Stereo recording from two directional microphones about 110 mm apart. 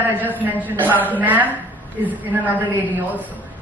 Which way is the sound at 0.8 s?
15° left (ahead or behind).